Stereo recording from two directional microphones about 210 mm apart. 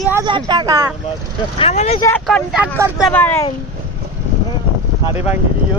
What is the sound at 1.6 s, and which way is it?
Speech, 30° left (ahead or behind).